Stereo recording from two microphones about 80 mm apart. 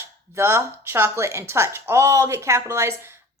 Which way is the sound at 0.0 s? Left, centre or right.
Right.